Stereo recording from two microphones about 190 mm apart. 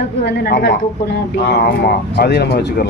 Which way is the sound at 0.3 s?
55° left (ahead or behind).